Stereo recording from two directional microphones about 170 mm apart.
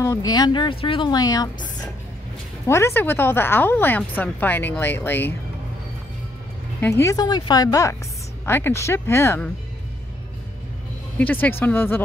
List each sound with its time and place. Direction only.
0.0 s speech: 20° left (ahead or behind)
7.0 s speech: 20° left (ahead or behind)
11.1 s speech: 10° left (ahead or behind)